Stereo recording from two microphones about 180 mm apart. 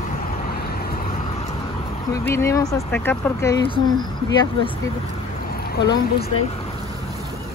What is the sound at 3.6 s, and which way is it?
Speech, 30° left (ahead or behind).